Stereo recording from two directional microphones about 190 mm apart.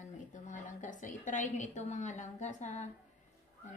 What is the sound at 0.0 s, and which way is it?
A woman's voice, 40° left (ahead or behind).